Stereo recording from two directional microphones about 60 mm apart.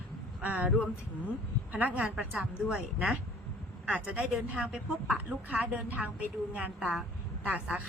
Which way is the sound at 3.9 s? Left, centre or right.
Right.